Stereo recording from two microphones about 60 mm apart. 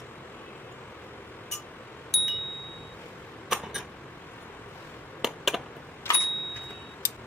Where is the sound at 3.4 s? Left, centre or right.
Centre.